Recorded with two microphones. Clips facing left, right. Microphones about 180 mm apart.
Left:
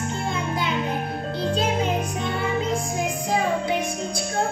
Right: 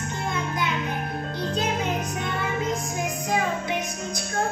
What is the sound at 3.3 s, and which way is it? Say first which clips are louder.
Child singing: left 3 dB; 30° left (ahead or behind).